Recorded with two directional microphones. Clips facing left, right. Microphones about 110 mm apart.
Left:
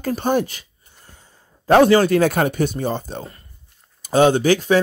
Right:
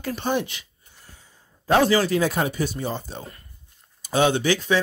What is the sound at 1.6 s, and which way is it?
Speech, 55° left (ahead or behind).